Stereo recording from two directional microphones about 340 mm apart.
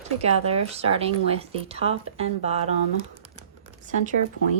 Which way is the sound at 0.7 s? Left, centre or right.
Centre.